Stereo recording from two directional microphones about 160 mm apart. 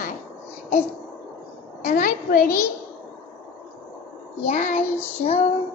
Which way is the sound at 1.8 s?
60° left (ahead or behind).